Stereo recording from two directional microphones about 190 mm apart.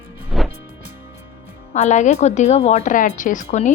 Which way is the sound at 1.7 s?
35° left (ahead or behind).